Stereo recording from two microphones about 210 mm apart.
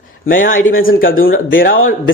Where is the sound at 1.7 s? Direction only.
75° left (ahead or behind).